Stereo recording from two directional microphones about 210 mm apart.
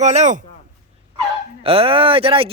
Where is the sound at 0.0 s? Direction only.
35° right (ahead or behind).